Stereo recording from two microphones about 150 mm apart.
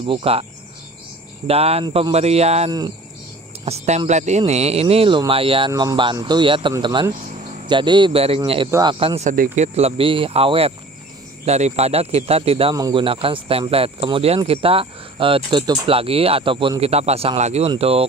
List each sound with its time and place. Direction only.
0.0 s speech: 35° right (ahead or behind)
1.5 s speech: 40° right (ahead or behind)
5.7 s speech: 20° right (ahead or behind)
5.9 s speech: 30° right (ahead or behind)
8.7 s speech: 15° right (ahead or behind)
9.2 s speech: 60° right (ahead or behind)
9.8 s speech: 40° right (ahead or behind)
12.7 s speech: 25° right (ahead or behind)
13.0 s speech: 35° right (ahead or behind)
15.9 s speech: 40° right (ahead or behind)